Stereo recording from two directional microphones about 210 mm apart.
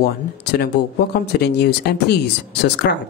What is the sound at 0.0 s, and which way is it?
A woman's voice, 50° left (ahead or behind).